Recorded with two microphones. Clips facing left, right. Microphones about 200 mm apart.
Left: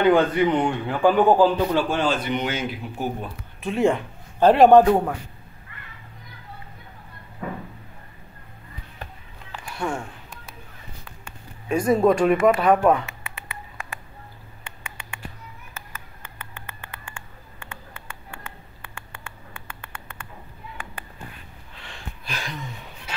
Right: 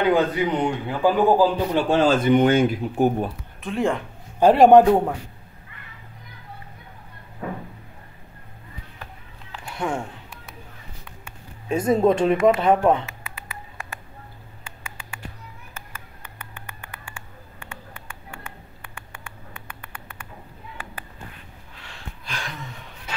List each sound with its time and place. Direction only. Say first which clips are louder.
0.0 s a man's voice: left 2 dB; 10° right (ahead or behind)
1.8 s speech: right 4 dB; 30° right (ahead or behind)
2.0 s speech: right 7 dB; 50° right (ahead or behind)
3.6 s speech: left 3 dB; centre (ahead or behind)
4.4 s a man's voice: right 1 dB; 15° right (ahead or behind)
11.7 s speech: even; 25° right (ahead or behind)
13.2 s a sound: even; 25° left (ahead or behind)
18.8 s a sound: even; 15° right (ahead or behind)
22.2 s a sound: even; 5° left (ahead or behind)